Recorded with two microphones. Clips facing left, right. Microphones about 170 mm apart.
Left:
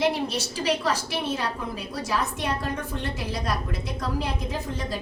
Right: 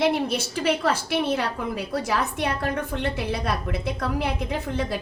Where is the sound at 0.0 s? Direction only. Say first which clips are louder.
Right 2 dB; 55° right (ahead or behind).